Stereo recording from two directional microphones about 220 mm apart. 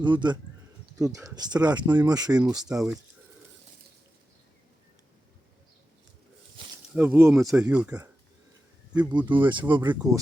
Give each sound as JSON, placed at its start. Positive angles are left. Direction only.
{"t": 0.0, "sound": "speech", "side_deg": -20}
{"t": 2.6, "sound": "speech", "side_deg": -5}
{"t": 6.9, "sound": "speech", "side_deg": -10}
{"t": 9.5, "sound": "speech", "side_deg": -20}
{"t": 9.9, "sound": "speech", "side_deg": -10}